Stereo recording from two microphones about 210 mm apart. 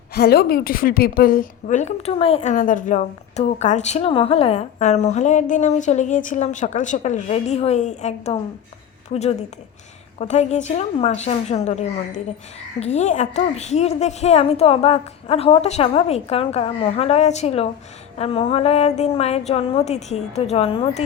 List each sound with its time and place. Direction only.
0.1 s a woman's voice: 50° left (ahead or behind); by 21.0 s 25° left (ahead or behind)